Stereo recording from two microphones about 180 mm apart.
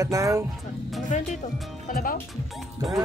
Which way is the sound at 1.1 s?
45° left (ahead or behind).